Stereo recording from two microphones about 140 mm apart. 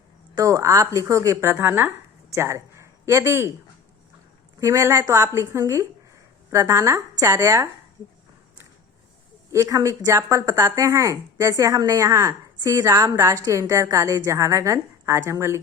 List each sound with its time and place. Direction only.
0.3 s speech: 25° right (ahead or behind)
4.6 s speech: 20° right (ahead or behind)
9.5 s speech: 20° right (ahead or behind)